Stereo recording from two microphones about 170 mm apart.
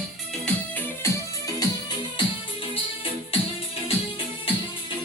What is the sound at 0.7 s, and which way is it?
Music, 10° left (ahead or behind).